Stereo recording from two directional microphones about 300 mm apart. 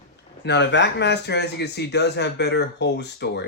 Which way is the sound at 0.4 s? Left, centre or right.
Left.